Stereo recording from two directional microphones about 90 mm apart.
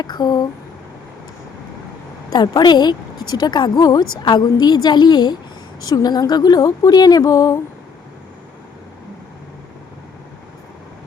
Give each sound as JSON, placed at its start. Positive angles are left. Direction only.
{"t": 0.0, "sound": "a woman's voice", "side_deg": 50}
{"t": 2.3, "sound": "a woman's voice", "side_deg": 50}